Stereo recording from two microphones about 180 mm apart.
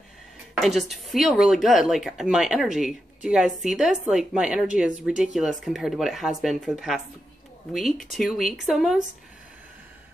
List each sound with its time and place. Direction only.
0.6 s speech: centre (ahead or behind)